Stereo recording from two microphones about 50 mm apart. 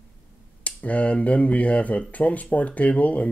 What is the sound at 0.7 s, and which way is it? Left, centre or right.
Speech, left.